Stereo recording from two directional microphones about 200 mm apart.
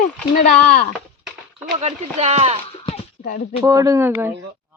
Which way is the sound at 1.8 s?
30° right (ahead or behind).